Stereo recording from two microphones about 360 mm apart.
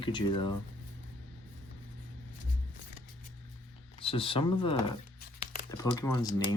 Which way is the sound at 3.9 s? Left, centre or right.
Centre.